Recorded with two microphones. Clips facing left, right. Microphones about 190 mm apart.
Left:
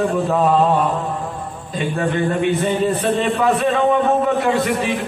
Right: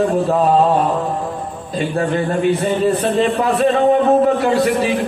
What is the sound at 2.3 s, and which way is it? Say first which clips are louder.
Speech: right 2 dB; 35° right (ahead or behind).